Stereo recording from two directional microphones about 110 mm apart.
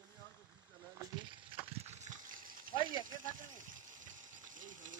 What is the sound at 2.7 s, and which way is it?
Frying, 45° left (ahead or behind).